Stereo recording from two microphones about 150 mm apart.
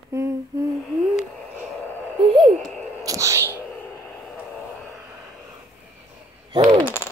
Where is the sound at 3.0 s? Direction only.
20° right (ahead or behind).